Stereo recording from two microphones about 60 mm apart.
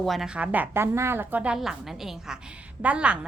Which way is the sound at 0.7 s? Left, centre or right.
Right.